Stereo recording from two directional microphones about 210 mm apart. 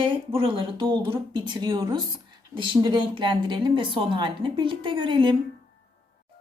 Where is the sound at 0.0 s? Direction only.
25° right (ahead or behind).